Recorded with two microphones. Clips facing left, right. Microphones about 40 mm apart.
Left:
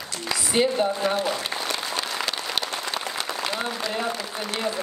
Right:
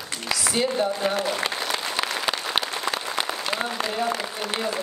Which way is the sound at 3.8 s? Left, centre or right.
Right.